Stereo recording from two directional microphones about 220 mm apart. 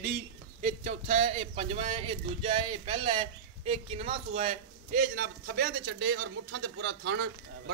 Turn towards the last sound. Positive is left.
turn(degrees=-55)  # may be behind; listen again after turning